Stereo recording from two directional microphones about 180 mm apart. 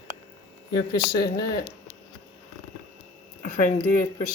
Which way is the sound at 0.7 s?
25° left (ahead or behind).